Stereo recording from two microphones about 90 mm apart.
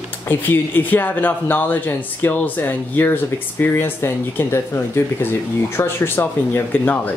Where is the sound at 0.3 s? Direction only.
20° left (ahead or behind).